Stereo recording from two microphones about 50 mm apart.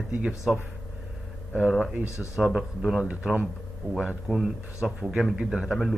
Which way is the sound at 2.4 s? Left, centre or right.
Centre.